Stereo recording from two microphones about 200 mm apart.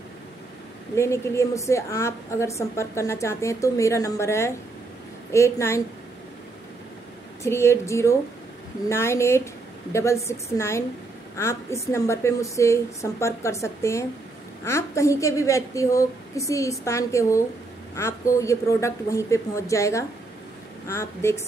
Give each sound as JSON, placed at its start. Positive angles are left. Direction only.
{"t": 0.9, "sound": "a woman's voice", "side_deg": 15}
{"t": 7.4, "sound": "a woman's voice", "side_deg": 15}